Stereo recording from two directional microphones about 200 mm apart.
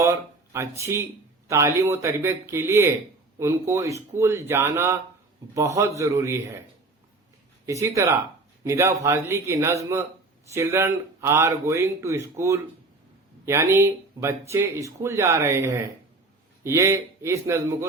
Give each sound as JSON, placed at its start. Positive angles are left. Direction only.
{"t": 0.0, "sound": "speech", "side_deg": -15}
{"t": 7.7, "sound": "speech", "side_deg": -15}